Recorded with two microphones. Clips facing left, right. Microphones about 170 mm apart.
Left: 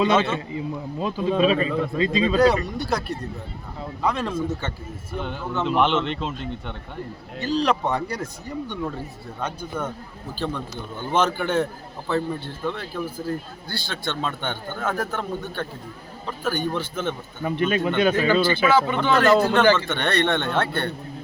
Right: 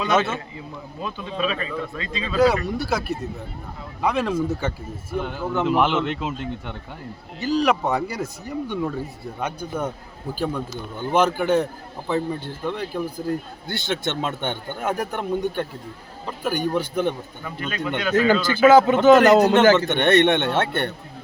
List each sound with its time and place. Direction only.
0.0 s a man's voice: 25° left (ahead or behind)
2.4 s a man's voice: centre (ahead or behind)
9.4 s a man's voice: 10° right (ahead or behind)
17.4 s speech: 25° left (ahead or behind)
18.1 s a man's voice: 45° right (ahead or behind)
19.2 s a man's voice: 20° right (ahead or behind)